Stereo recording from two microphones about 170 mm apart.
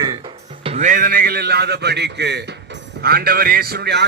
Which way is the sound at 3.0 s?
65° right (ahead or behind).